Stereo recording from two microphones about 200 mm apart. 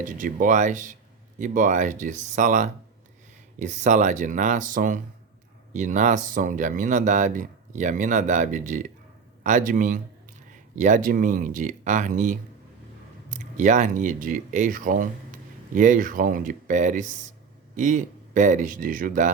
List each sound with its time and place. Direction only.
0.0 s speech: 40° right (ahead or behind)